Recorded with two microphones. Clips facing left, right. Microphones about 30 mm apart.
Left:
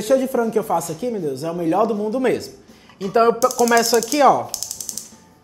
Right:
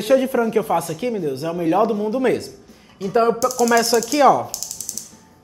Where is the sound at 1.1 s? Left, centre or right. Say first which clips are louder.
Even; right.